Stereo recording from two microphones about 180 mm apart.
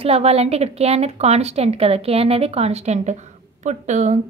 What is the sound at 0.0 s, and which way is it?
A woman's voice, 35° right (ahead or behind).